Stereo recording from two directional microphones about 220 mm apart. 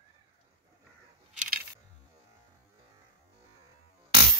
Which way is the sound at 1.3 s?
35° right (ahead or behind).